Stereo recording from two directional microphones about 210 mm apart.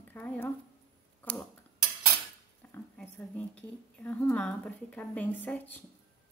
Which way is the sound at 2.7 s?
5° left (ahead or behind).